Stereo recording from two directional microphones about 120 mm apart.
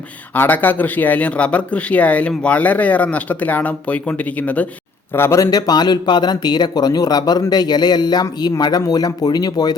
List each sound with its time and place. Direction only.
0.3 s speech: 15° left (ahead or behind)
5.1 s speech: 20° left (ahead or behind)